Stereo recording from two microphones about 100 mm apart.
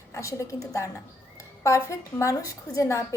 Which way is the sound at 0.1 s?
30° left (ahead or behind).